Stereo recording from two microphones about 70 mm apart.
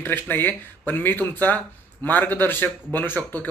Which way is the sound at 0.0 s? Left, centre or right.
Left.